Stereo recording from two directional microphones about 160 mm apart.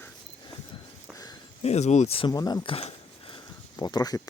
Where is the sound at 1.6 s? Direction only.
45° left (ahead or behind).